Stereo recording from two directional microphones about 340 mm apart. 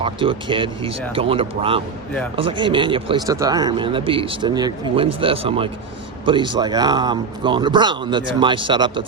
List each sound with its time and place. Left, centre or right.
0.0 s speech: centre